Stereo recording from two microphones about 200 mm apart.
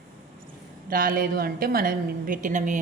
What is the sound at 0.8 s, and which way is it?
A woman's voice, 45° right (ahead or behind).